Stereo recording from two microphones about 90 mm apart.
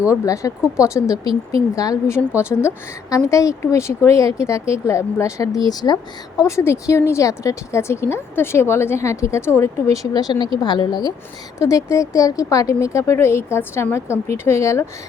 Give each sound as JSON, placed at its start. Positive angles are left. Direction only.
{"t": 0.1, "sound": "a woman's voice", "side_deg": 35}
{"t": 2.1, "sound": "a woman's voice", "side_deg": 30}
{"t": 6.4, "sound": "a woman's voice", "side_deg": 35}
{"t": 10.1, "sound": "a woman's voice", "side_deg": 50}
{"t": 11.6, "sound": "a woman's voice", "side_deg": 35}